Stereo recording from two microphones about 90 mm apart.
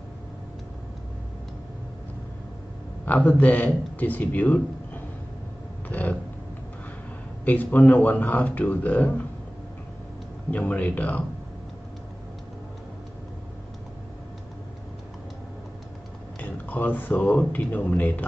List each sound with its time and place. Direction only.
3.1 s speech: 20° left (ahead or behind)
5.9 s a sound: 20° left (ahead or behind)
7.4 s speech: 20° left (ahead or behind)
10.5 s speech: 20° left (ahead or behind)
16.3 s speech: 20° left (ahead or behind)